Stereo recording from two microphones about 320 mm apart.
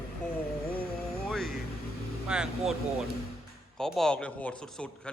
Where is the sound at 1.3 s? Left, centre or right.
Centre.